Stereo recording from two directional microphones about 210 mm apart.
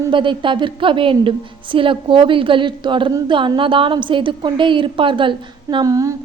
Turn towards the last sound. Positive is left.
turn(degrees=-15)  # may be behind; listen again after turning